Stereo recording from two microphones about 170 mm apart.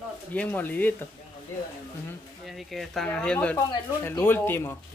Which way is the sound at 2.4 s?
Centre (ahead or behind).